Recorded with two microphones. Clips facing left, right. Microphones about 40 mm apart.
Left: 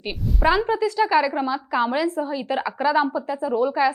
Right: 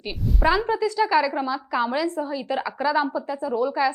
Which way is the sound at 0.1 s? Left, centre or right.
Centre.